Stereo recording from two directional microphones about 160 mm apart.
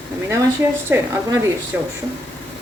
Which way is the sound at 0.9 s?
15° right (ahead or behind).